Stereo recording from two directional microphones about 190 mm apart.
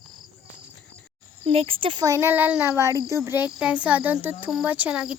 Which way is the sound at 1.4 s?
30° right (ahead or behind).